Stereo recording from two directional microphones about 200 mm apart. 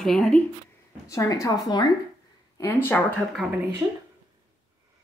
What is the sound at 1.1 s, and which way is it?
Speech, 15° left (ahead or behind).